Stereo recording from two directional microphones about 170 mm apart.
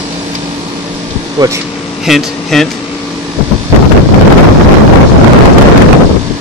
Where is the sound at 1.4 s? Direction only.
25° right (ahead or behind).